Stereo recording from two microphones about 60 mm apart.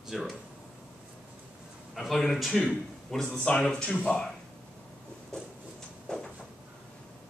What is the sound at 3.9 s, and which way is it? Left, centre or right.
Speech, left.